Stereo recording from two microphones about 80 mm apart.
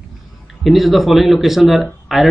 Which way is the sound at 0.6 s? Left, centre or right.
Centre.